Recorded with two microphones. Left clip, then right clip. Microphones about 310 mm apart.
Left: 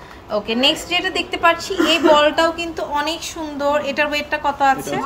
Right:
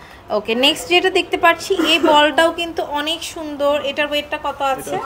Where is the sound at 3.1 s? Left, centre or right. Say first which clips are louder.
Right 2 dB; right.